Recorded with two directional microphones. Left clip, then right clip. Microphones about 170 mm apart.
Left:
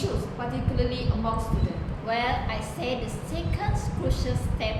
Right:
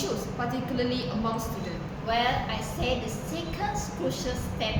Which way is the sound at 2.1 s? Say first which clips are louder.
Right 1 dB; 30° left (ahead or behind).